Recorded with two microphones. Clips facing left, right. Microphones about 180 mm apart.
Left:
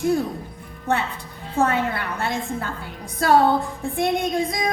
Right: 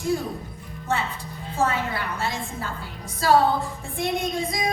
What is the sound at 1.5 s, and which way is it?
A woman's voice, 60° left (ahead or behind).